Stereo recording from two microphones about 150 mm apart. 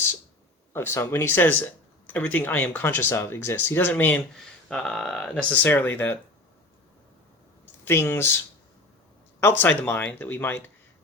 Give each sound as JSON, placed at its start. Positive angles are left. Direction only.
{"t": 0.7, "sound": "speech", "side_deg": 15}
{"t": 7.9, "sound": "speech", "side_deg": 15}
{"t": 9.4, "sound": "speech", "side_deg": 15}